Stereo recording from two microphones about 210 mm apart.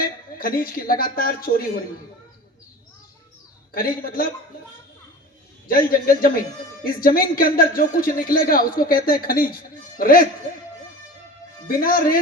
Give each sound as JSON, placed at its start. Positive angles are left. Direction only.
{"t": 0.0, "sound": "speech", "side_deg": 45}
{"t": 3.8, "sound": "speech", "side_deg": 45}
{"t": 5.6, "sound": "speech", "side_deg": 45}
{"t": 11.7, "sound": "speech", "side_deg": 45}